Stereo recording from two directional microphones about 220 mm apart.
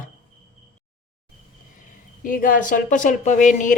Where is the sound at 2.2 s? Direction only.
40° left (ahead or behind).